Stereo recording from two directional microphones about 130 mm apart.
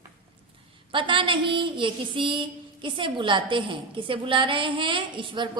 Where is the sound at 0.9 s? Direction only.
40° right (ahead or behind).